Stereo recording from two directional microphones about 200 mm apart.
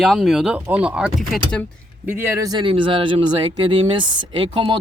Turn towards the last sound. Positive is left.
turn(degrees=-25)  # may be behind; listen again after turning